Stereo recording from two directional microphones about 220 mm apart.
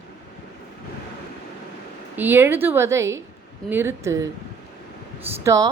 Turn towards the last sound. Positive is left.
turn(degrees=-15)  # may be behind; listen again after turning